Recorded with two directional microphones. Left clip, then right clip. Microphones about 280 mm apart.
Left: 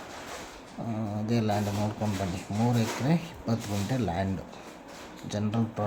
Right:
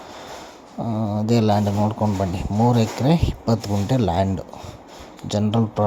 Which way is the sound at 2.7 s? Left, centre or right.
Right.